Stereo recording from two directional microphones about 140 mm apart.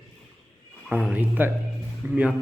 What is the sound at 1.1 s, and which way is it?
Speech, 15° right (ahead or behind).